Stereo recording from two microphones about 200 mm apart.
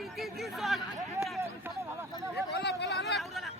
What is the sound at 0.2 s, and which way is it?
Speech, centre (ahead or behind).